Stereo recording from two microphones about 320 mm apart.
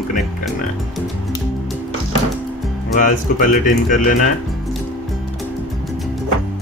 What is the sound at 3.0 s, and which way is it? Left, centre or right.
Speech, left.